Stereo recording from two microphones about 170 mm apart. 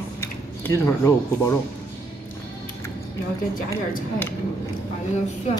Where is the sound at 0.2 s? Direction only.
15° left (ahead or behind).